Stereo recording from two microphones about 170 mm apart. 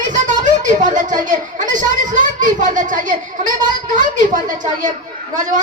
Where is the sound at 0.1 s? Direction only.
45° right (ahead or behind).